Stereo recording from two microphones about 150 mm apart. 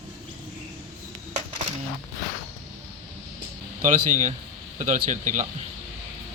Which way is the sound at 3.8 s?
55° right (ahead or behind).